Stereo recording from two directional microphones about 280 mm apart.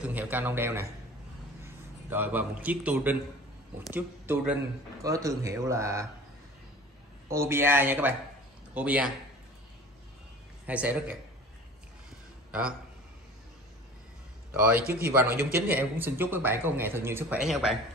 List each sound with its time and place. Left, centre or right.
0.0 s a man's voice: centre
7.2 s speech: centre
10.7 s speech: centre
12.4 s a sound: centre
14.5 s a man's voice: centre
14.8 s speech: right
15.0 s speech: centre